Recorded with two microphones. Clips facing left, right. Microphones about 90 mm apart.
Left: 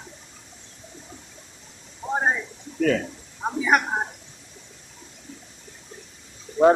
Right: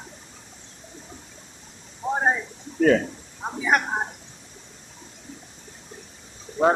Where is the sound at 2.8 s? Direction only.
35° right (ahead or behind).